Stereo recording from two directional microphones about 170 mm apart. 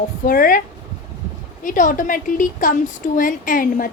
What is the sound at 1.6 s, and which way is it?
A woman's voice, 50° left (ahead or behind).